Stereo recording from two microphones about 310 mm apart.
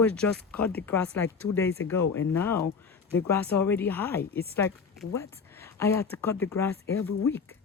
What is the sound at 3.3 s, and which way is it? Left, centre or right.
Speech, centre.